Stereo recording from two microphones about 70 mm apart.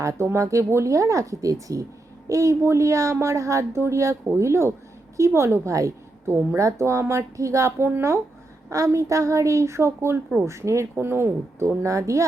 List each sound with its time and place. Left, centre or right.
0.0 s a woman's voice: right